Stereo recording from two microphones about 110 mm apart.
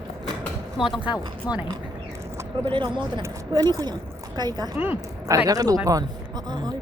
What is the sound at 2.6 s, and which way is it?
Speech, 50° right (ahead or behind).